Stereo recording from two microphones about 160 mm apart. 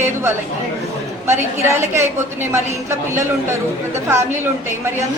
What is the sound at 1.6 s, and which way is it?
Speech, 15° right (ahead or behind).